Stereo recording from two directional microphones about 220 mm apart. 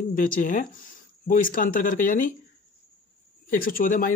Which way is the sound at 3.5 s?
40° left (ahead or behind).